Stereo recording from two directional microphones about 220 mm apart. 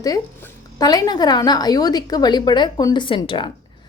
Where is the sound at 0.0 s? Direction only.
15° left (ahead or behind).